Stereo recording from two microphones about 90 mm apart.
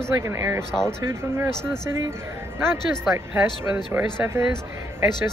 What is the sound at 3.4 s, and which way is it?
Speech, 20° right (ahead or behind).